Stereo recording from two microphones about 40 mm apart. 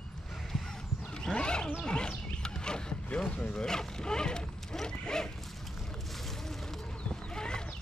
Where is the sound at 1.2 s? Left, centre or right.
Left.